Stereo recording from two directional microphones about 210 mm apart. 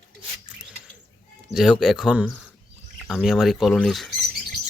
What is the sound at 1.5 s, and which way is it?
Speech, centre (ahead or behind).